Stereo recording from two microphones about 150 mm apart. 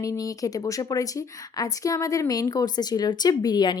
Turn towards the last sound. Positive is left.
turn(degrees=30)  # may be behind; listen again after turning